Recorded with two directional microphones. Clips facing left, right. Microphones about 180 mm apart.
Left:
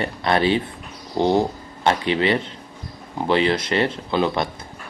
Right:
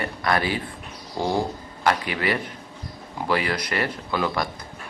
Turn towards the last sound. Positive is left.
turn(degrees=25)  # may be behind; listen again after turning